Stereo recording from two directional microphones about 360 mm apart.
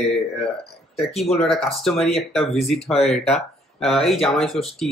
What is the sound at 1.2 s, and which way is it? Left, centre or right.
Speech, centre.